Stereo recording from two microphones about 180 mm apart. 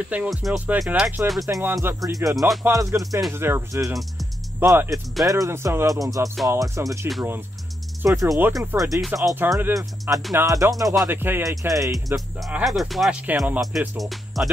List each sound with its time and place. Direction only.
0.1 s speech: 5° right (ahead or behind)
1.5 s speech: 15° right (ahead or behind)
2.0 s music: 20° right (ahead or behind)
2.6 s speech: 15° right (ahead or behind)
12.4 s speech: 5° right (ahead or behind)